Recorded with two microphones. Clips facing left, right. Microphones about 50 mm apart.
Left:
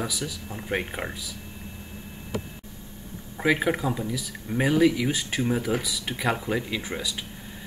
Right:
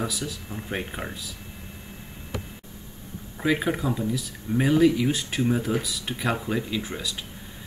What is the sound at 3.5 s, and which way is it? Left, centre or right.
Speech, centre.